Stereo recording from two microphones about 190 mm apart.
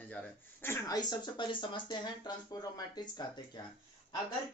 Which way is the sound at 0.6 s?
15° left (ahead or behind).